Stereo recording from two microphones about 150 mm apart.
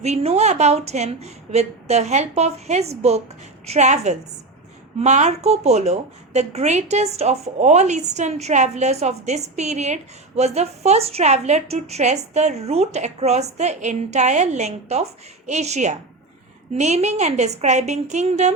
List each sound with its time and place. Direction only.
0.0 s a woman's voice: 45° right (ahead or behind)